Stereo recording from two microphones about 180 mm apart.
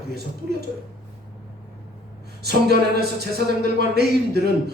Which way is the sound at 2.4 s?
65° right (ahead or behind).